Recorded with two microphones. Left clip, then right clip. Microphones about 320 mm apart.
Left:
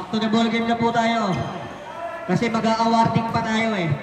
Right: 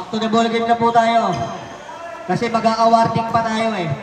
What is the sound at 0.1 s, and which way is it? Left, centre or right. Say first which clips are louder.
A man's voice: right 5 dB; centre.